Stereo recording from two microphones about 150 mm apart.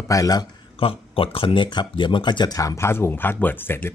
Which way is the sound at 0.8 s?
40° left (ahead or behind).